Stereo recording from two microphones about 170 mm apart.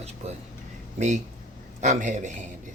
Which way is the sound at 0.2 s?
40° right (ahead or behind).